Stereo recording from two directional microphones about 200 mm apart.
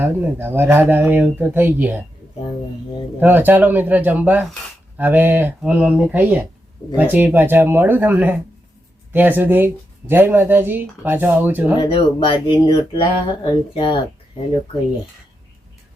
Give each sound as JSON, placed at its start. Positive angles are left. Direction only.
{"t": 0.0, "sound": "speech", "side_deg": -10}
{"t": 3.2, "sound": "speech", "side_deg": -10}
{"t": 11.8, "sound": "speech", "side_deg": 25}